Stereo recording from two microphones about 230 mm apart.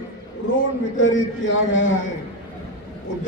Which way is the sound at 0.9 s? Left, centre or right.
Left.